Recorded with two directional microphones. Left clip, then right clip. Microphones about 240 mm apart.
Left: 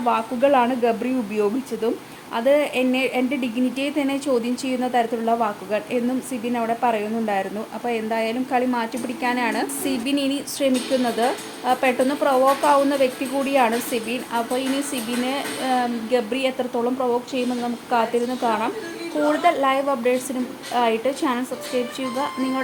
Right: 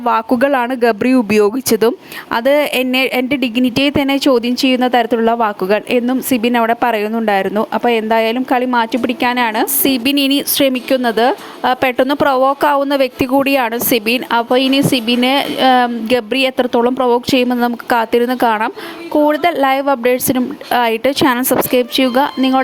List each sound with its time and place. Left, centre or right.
0.0 s speech: right